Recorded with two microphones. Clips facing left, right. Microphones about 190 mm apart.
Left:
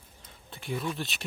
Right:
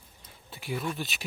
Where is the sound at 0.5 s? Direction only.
5° right (ahead or behind).